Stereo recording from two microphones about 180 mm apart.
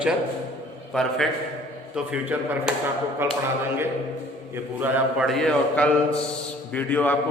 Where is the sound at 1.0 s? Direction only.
5° left (ahead or behind).